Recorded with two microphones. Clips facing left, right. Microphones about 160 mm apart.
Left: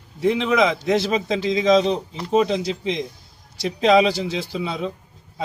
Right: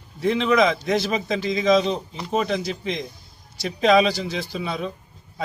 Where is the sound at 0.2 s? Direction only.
20° left (ahead or behind).